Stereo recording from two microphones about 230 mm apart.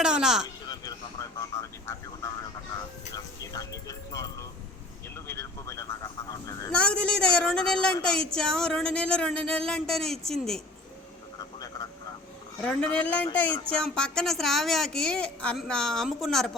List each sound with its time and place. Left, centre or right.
0.0 s speech: centre
0.4 s a sound: centre
1.4 s speech: centre
3.4 s speech: centre
12.6 s speech: centre